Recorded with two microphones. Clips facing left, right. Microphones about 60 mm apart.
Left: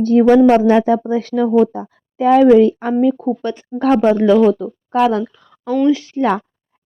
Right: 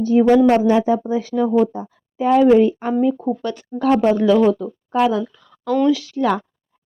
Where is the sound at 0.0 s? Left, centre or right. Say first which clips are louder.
Left 3 dB; left.